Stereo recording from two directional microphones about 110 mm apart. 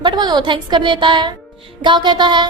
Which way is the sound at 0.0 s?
40° right (ahead or behind).